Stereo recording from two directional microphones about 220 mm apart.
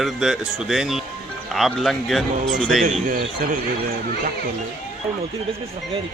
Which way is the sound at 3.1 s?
35° right (ahead or behind).